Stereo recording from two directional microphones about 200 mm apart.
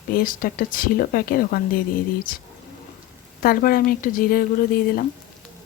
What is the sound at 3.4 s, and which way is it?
Speech, 45° left (ahead or behind).